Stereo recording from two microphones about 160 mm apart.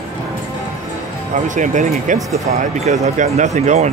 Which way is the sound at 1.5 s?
50° right (ahead or behind).